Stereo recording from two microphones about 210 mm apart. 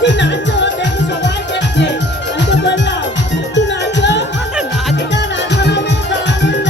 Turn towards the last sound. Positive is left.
turn(degrees=55)  # may be behind; listen again after turning